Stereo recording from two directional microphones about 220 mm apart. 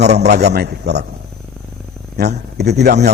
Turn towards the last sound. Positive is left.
turn(degrees=-50)  # may be behind; listen again after turning